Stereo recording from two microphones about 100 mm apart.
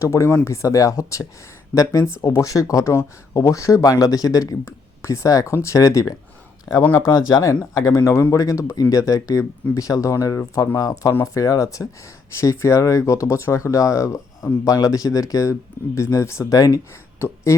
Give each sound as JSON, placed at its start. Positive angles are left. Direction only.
{"t": 0.0, "sound": "speech", "side_deg": 30}